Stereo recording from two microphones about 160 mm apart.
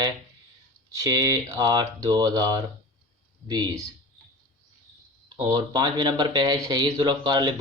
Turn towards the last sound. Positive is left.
turn(degrees=-30)  # may be behind; listen again after turning